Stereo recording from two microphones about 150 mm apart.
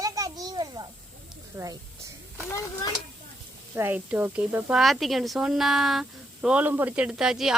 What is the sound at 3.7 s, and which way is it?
Speech, 15° right (ahead or behind).